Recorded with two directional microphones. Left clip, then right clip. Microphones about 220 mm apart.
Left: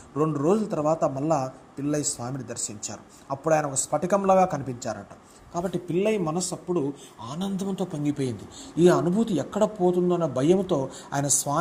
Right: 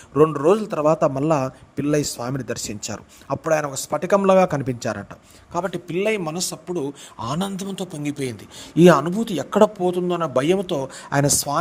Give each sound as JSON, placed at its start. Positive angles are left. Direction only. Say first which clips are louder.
{"t": 0.1, "sound": "a man's voice", "louder": "right 8 dB", "side_deg": -45}
{"t": 0.7, "sound": "speech", "louder": "right 6 dB", "side_deg": -35}